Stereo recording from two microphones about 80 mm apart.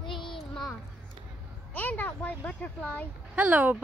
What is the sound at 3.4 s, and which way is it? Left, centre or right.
Speech, centre.